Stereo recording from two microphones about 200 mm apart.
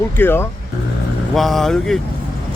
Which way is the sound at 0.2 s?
10° left (ahead or behind).